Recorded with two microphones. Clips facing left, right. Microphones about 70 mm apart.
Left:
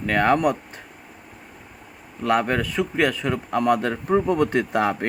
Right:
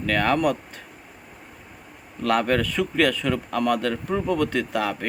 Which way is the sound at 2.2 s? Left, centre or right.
Centre.